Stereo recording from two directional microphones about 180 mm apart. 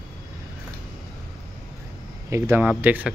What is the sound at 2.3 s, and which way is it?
Speech, 10° right (ahead or behind).